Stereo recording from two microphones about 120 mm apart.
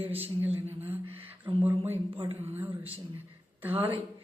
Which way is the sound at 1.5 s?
45° right (ahead or behind).